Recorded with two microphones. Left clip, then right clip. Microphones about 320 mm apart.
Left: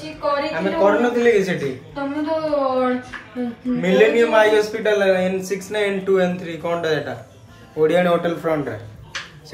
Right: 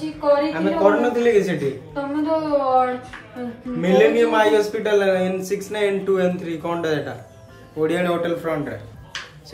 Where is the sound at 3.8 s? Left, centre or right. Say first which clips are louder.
Even; centre.